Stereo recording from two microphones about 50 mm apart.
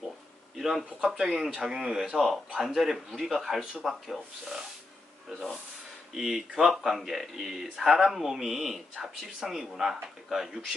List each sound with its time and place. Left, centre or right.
0.5 s a sound: centre
0.9 s speech: centre
2.1 s speech: centre
3.6 s speech: centre
3.8 s speech: centre
6.1 s speech: centre